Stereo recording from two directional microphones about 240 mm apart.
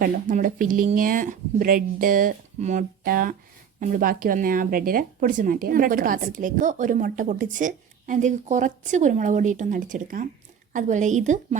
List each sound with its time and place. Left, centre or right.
0.0 s speech: right